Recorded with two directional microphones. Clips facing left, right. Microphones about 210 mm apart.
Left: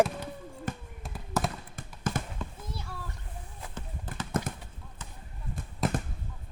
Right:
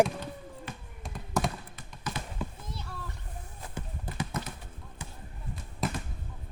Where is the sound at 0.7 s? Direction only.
45° left (ahead or behind).